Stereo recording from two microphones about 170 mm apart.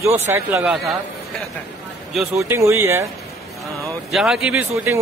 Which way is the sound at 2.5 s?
15° right (ahead or behind).